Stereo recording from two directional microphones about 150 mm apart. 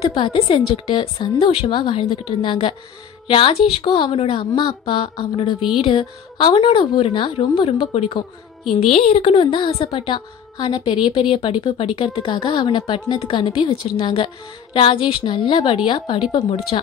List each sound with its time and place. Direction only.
0.1 s a woman's voice: 35° left (ahead or behind)